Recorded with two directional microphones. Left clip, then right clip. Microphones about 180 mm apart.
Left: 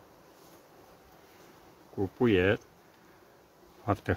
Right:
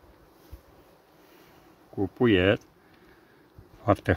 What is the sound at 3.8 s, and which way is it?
Speech, 50° right (ahead or behind).